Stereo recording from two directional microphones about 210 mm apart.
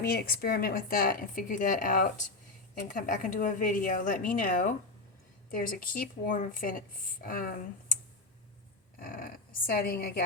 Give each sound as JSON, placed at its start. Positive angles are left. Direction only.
{"t": 0.0, "sound": "a woman's voice", "side_deg": 45}
{"t": 9.0, "sound": "speech", "side_deg": 45}